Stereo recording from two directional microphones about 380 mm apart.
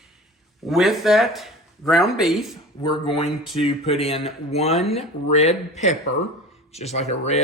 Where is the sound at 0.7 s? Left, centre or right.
Centre.